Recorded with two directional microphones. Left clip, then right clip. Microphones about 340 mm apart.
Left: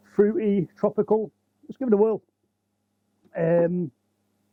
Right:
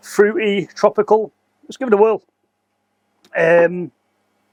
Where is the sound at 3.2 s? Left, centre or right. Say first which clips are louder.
Right 9 dB; centre.